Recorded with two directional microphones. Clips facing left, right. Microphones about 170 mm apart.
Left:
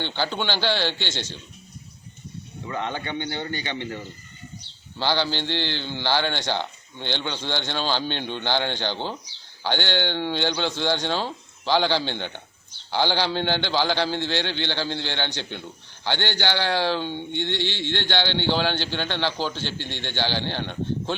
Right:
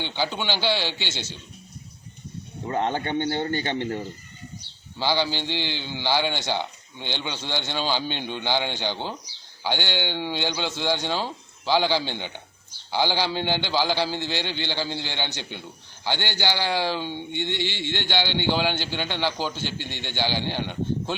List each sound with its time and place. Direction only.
0.0 s speech: 10° right (ahead or behind)
2.6 s a man's voice: 45° right (ahead or behind)
4.9 s speech: 10° right (ahead or behind)